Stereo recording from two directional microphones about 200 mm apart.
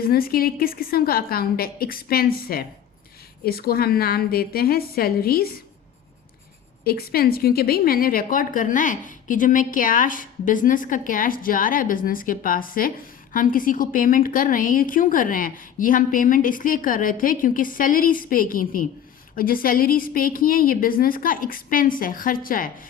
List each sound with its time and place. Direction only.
0.1 s a woman's voice: 50° left (ahead or behind)
6.8 s a woman's voice: 50° left (ahead or behind)